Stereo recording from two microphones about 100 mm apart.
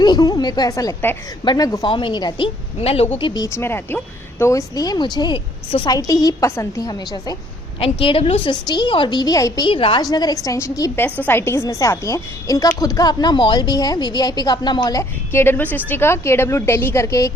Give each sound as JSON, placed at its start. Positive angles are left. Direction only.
{"t": 0.0, "sound": "a woman's voice", "side_deg": 40}
{"t": 1.9, "sound": "a woman's voice", "side_deg": 55}
{"t": 2.8, "sound": "speech", "side_deg": 80}
{"t": 3.2, "sound": "a woman's voice", "side_deg": 55}
{"t": 3.4, "sound": "a woman's voice", "side_deg": 25}
{"t": 6.8, "sound": "a woman's voice", "side_deg": 45}
{"t": 7.8, "sound": "a woman's voice", "side_deg": 65}
{"t": 8.6, "sound": "a woman's voice", "side_deg": 50}
{"t": 9.6, "sound": "a woman's voice", "side_deg": 60}
{"t": 10.0, "sound": "a woman's voice", "side_deg": 40}
{"t": 10.9, "sound": "a woman's voice", "side_deg": 20}
{"t": 15.3, "sound": "a woman's voice", "side_deg": 25}